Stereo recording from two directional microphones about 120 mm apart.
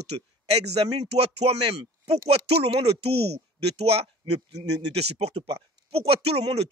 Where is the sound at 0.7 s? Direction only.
60° right (ahead or behind).